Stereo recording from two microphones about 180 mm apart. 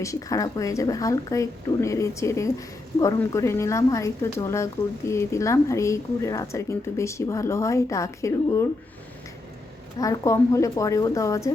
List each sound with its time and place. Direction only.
0.0 s speech: 20° left (ahead or behind)
10.0 s speech: 20° left (ahead or behind)